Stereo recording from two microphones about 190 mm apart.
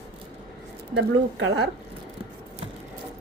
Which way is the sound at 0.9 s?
75° right (ahead or behind).